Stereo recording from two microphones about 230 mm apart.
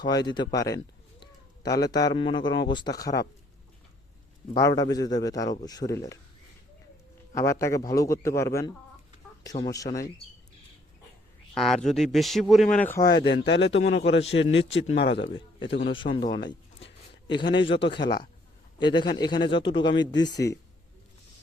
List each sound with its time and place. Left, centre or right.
0.0 s a man's voice: centre
4.5 s a man's voice: centre
7.3 s a man's voice: centre
11.5 s speech: centre
13.1 s a man's voice: left
16.0 s a man's voice: left
18.9 s speech: centre